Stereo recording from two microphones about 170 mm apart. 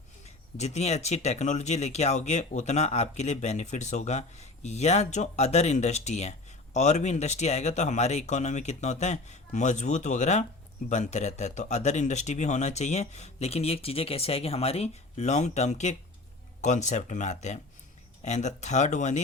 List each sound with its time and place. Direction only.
0.3 s speech: 40° left (ahead or behind)